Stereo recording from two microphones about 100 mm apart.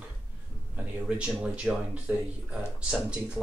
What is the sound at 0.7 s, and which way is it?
Speech, 15° right (ahead or behind).